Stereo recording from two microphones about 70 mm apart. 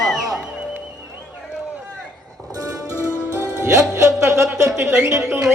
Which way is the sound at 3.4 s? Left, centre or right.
Right.